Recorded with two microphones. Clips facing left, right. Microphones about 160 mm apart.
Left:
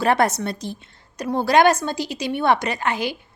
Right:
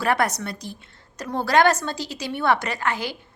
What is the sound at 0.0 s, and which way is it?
A woman's voice, 25° left (ahead or behind).